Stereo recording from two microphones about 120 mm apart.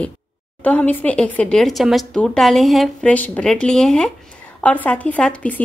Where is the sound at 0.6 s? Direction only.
10° left (ahead or behind).